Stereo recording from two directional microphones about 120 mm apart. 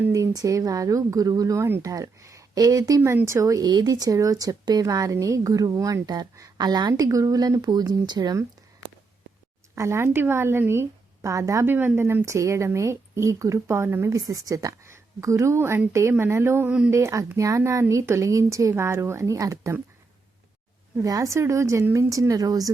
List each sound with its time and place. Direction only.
0.1 s speech: 25° right (ahead or behind)
3.0 s a woman's voice: 20° right (ahead or behind)
9.7 s speech: 25° right (ahead or behind)
21.0 s speech: 30° right (ahead or behind)